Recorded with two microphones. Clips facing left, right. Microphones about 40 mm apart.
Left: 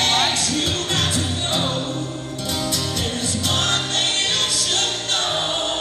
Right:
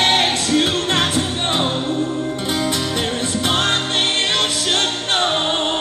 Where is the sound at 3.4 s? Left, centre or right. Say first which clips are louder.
Right 3 dB; right.